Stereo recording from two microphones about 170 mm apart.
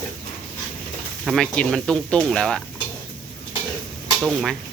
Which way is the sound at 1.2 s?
Centre (ahead or behind).